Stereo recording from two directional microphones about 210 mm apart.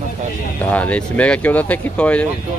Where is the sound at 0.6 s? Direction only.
5° left (ahead or behind).